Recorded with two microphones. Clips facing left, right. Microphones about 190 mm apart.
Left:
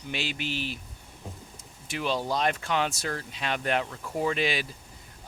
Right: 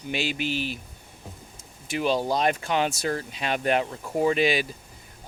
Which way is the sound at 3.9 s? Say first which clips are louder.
Right 5 dB; 20° right (ahead or behind).